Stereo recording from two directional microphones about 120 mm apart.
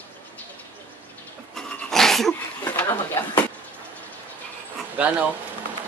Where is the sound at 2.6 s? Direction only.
20° left (ahead or behind).